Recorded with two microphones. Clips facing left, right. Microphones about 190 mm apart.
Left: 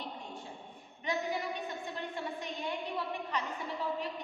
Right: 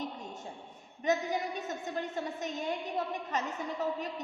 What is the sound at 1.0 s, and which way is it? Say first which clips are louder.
A woman's voice: right 4 dB; 45° right (ahead or behind).